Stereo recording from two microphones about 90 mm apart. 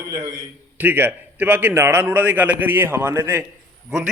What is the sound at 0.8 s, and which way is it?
A man's voice, 20° right (ahead or behind).